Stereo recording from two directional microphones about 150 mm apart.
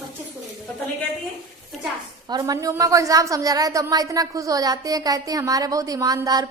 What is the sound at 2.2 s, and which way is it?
A woman's voice, 25° right (ahead or behind).